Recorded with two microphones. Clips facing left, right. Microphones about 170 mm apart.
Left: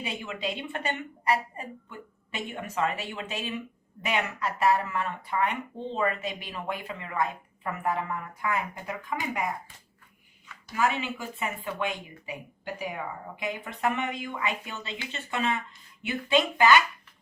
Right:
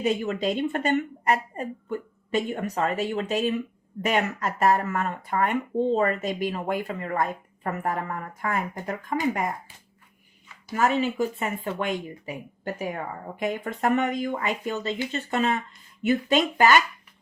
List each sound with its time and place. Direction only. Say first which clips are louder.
0.0 s speech: right 9 dB; 45° right (ahead or behind)
10.7 s a woman's voice: right 5 dB; 45° right (ahead or behind)